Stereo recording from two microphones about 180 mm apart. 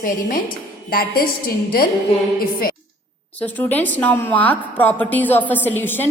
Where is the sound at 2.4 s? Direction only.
55° left (ahead or behind).